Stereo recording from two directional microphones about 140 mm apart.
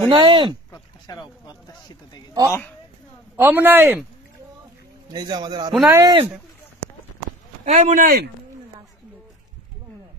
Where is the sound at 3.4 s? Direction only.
15° right (ahead or behind).